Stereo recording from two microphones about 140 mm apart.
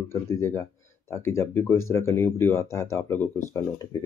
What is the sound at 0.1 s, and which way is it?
Speech, 20° left (ahead or behind).